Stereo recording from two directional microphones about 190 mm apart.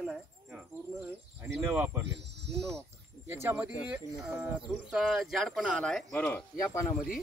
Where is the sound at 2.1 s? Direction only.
65° right (ahead or behind).